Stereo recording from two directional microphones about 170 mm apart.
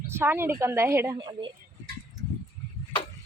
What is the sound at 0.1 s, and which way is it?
Speech, 15° right (ahead or behind).